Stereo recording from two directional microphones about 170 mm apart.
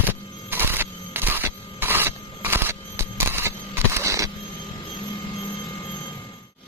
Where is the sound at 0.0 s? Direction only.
10° right (ahead or behind).